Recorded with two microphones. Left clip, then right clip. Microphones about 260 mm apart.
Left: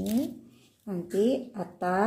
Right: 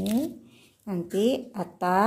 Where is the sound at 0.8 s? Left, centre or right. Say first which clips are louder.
Right 1 dB; right.